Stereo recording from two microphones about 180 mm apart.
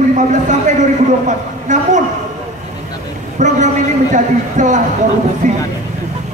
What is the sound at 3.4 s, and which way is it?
A man's voice, 40° right (ahead or behind).